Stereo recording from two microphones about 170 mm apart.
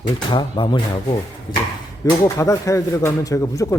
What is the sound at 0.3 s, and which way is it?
Speech, 25° left (ahead or behind).